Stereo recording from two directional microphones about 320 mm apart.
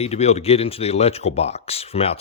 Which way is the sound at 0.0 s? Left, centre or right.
Centre.